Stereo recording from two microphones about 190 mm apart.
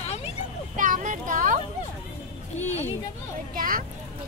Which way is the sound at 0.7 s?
45° right (ahead or behind).